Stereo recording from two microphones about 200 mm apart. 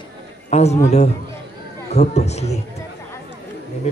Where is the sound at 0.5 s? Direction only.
35° left (ahead or behind).